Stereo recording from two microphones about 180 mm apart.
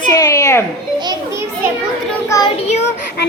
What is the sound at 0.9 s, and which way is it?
Children playing, 20° right (ahead or behind).